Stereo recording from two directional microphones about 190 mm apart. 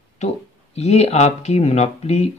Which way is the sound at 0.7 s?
35° left (ahead or behind).